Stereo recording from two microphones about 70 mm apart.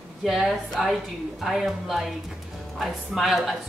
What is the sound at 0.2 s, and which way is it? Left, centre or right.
A woman's voice, centre.